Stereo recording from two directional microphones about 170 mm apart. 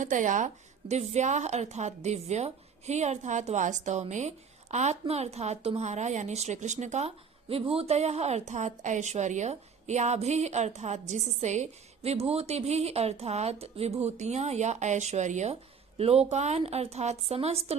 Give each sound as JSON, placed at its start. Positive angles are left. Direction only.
{"t": 0.0, "sound": "a woman's voice", "side_deg": -45}